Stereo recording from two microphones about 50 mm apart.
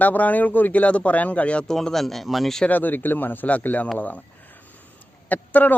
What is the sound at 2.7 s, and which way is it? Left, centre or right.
Speech, left.